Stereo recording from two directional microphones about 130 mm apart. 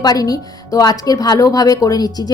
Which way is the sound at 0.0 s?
30° left (ahead or behind).